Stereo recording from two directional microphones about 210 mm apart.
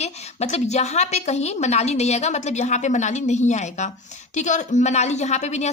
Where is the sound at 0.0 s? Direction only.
30° left (ahead or behind).